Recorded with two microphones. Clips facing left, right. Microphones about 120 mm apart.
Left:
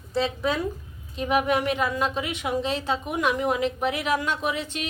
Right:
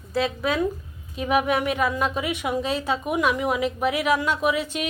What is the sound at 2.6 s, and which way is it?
Speech, 25° left (ahead or behind).